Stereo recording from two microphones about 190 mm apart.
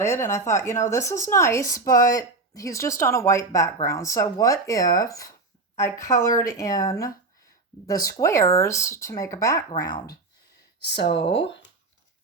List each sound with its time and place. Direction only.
0.0 s speech: 15° left (ahead or behind)
10.8 s speech: 65° left (ahead or behind)
11.1 s speech: 30° left (ahead or behind)